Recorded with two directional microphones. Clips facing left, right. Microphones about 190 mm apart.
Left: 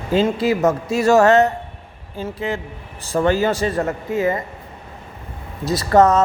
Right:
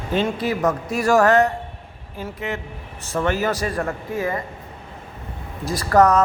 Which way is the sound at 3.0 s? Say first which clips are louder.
Left 5 dB; 35° left (ahead or behind).